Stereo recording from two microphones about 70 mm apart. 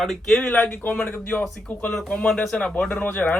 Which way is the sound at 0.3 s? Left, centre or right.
Centre.